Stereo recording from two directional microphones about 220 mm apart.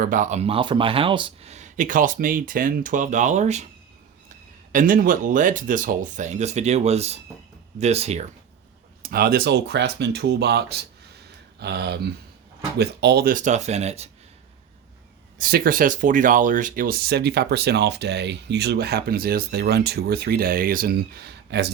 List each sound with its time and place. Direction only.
0.0 s speech: 35° right (ahead or behind)
4.7 s speech: 40° right (ahead or behind)
9.0 s speech: 45° right (ahead or behind)
15.4 s speech: 40° right (ahead or behind)